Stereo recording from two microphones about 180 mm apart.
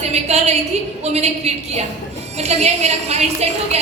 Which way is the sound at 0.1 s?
35° right (ahead or behind).